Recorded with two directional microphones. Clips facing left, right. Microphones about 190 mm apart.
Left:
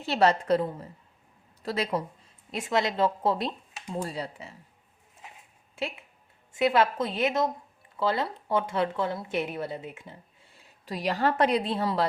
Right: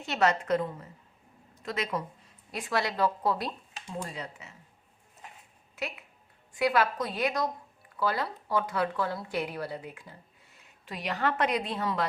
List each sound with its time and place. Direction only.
0.0 s a woman's voice: 30° left (ahead or behind)
5.7 s speech: 30° left (ahead or behind)